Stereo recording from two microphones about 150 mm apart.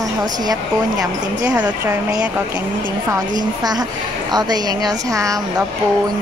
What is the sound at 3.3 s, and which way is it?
A woman's voice, 25° right (ahead or behind).